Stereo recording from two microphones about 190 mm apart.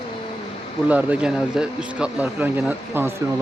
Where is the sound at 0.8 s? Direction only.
5° right (ahead or behind).